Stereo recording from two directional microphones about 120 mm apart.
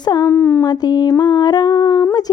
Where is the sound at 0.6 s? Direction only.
35° left (ahead or behind).